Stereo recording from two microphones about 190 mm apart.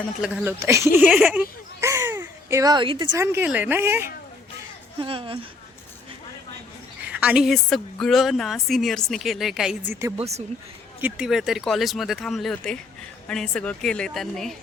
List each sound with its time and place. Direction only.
0.2 s a woman's voice: 15° right (ahead or behind)
0.9 s a sound: 10° right (ahead or behind); by 3.1 s 25° right (ahead or behind)
3.2 s a woman's voice: 10° right (ahead or behind)
4.9 s speech: 25° right (ahead or behind)
7.0 s a woman's voice: 5° right (ahead or behind)
11.0 s a woman's voice: 5° right (ahead or behind)